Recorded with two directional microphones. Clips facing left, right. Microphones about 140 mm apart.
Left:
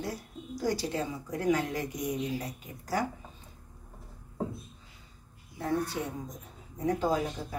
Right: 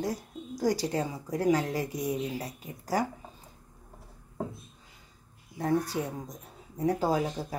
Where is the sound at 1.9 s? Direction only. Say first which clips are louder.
Right 2 dB; 15° left (ahead or behind).